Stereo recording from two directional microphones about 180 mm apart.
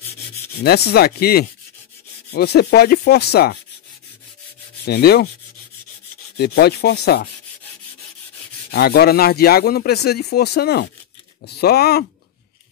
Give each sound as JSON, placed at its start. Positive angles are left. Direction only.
{"t": 0.7, "sound": "speech", "side_deg": 65}
{"t": 4.8, "sound": "speech", "side_deg": 60}
{"t": 6.3, "sound": "speech", "side_deg": 60}
{"t": 8.7, "sound": "speech", "side_deg": 60}